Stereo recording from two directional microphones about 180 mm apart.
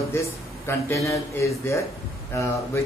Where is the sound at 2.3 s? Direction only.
15° left (ahead or behind).